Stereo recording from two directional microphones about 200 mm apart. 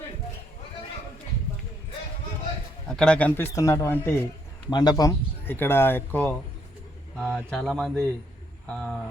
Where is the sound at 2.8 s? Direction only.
5° left (ahead or behind).